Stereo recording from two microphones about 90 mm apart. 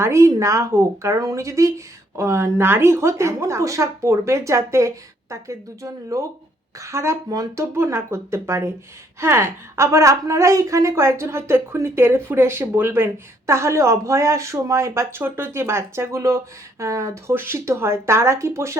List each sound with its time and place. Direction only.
0.0 s a woman's voice: 35° right (ahead or behind)